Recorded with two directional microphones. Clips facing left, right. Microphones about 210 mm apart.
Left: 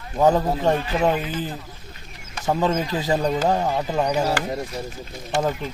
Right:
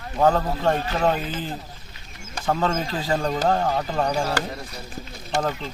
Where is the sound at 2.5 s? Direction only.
15° left (ahead or behind).